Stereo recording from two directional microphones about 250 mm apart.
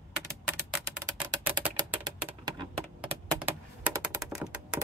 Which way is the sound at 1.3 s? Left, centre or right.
Centre.